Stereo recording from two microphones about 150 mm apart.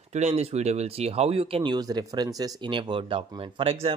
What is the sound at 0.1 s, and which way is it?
Speech, 45° right (ahead or behind).